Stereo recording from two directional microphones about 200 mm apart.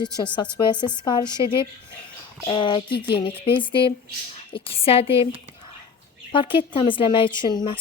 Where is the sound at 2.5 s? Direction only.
25° left (ahead or behind).